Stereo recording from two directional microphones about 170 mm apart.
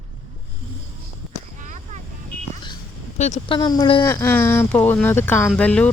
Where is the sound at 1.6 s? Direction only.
45° right (ahead or behind).